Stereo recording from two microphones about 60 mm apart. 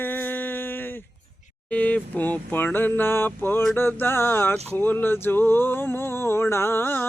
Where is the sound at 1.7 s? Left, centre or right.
Left.